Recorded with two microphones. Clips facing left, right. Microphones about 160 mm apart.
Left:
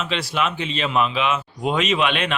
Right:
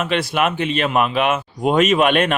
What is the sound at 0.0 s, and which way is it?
Speech, 55° right (ahead or behind).